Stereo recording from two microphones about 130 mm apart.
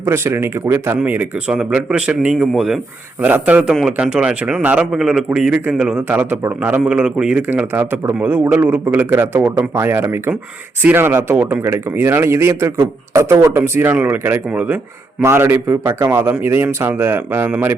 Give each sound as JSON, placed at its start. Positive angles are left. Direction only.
{"t": 0.0, "sound": "a man's voice", "side_deg": -20}
{"t": 3.2, "sound": "a man's voice", "side_deg": -15}